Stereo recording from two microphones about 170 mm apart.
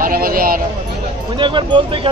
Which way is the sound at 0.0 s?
60° right (ahead or behind).